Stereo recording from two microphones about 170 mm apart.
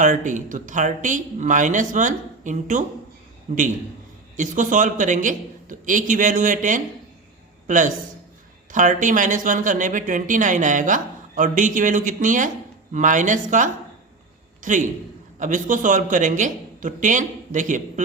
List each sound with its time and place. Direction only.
0.0 s a man's voice: 50° right (ahead or behind)